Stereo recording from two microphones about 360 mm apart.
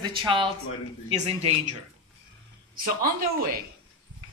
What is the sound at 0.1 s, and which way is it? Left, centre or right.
Speech, centre.